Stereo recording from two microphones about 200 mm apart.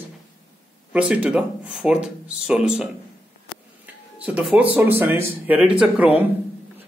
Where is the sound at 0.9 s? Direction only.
5° right (ahead or behind).